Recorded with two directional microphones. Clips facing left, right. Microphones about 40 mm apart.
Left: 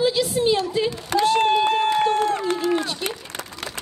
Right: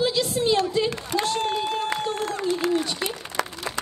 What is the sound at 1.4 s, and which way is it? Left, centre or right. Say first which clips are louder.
Speech: left 7 dB; left.